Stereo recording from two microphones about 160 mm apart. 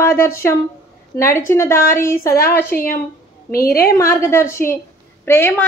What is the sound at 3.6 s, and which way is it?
Speech, 75° left (ahead or behind).